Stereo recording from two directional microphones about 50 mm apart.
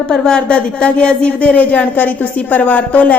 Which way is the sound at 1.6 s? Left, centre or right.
Left.